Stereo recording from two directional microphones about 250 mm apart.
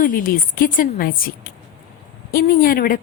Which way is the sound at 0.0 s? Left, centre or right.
Left.